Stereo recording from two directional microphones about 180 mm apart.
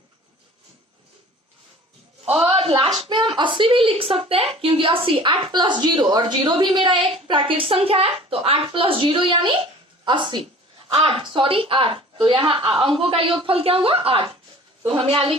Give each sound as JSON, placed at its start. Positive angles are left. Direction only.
{"t": 2.5, "sound": "a woman's voice", "side_deg": -30}